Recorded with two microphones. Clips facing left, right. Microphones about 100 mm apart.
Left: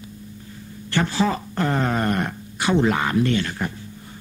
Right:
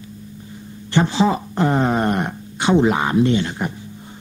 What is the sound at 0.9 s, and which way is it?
Speech, 20° right (ahead or behind).